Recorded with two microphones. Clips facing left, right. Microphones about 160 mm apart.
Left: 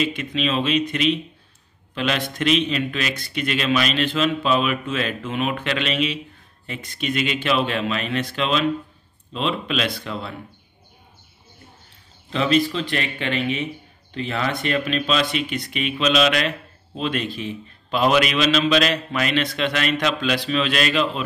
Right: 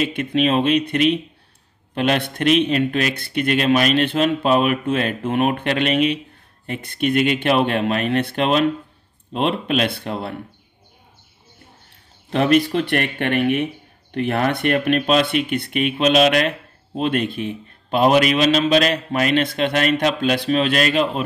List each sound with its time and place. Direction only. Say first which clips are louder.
0.0 s speech: right 4 dB; 55° right (ahead or behind)
12.3 s speech: right 3 dB; 60° right (ahead or behind)